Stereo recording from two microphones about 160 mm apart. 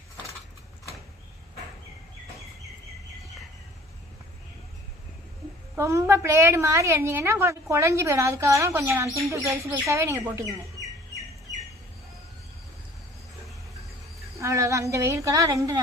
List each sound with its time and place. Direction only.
5.7 s a woman's voice: 20° right (ahead or behind)
14.3 s a woman's voice: 20° right (ahead or behind)